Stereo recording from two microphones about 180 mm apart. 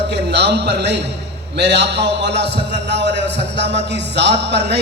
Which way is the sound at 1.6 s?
70° right (ahead or behind).